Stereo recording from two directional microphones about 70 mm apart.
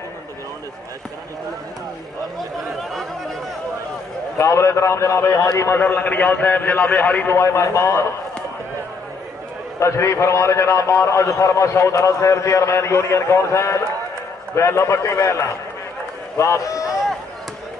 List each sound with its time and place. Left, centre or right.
2.7 s chatter: centre
4.4 s a man's voice: left
5.8 s a man's voice: left
7.3 s a man's voice: left
9.8 s a man's voice: left